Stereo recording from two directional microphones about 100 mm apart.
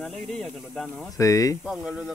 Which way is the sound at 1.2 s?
35° left (ahead or behind).